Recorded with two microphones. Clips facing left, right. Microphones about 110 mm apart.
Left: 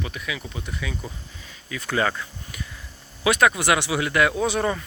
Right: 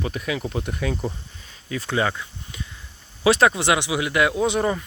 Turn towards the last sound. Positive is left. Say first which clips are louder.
# right 2 dB
turn(degrees=-20)  # may be behind; listen again after turning